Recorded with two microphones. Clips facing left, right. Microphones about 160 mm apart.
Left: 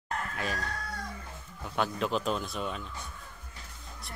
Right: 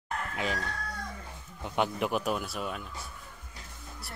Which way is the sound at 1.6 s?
15° right (ahead or behind).